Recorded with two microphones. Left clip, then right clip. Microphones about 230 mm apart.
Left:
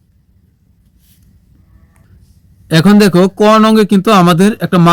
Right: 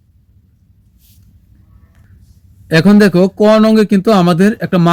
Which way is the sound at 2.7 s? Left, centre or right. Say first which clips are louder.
Even; left.